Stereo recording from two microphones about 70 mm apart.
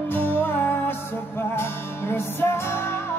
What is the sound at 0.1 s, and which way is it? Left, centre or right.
Music, left.